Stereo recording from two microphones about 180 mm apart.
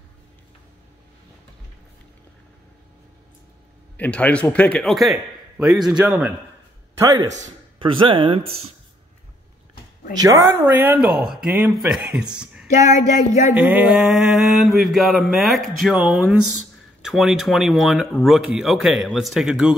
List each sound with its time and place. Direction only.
3.9 s mantra: 10° left (ahead or behind)
7.0 s speech: 20° right (ahead or behind)
10.1 s a woman's voice: 15° right (ahead or behind)
11.4 s mantra: 5° right (ahead or behind)
12.8 s a sound: 40° left (ahead or behind)
13.6 s mantra: 5° right (ahead or behind)